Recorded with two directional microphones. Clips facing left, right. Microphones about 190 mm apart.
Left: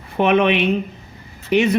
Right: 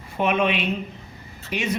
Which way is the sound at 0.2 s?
65° left (ahead or behind).